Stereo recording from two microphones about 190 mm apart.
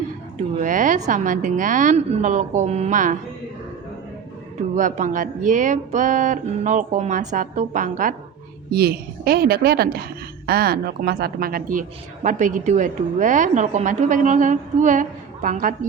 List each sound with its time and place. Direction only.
0.6 s speech: 40° right (ahead or behind)
4.7 s speech: 40° right (ahead or behind)
8.7 s a woman's voice: 55° right (ahead or behind)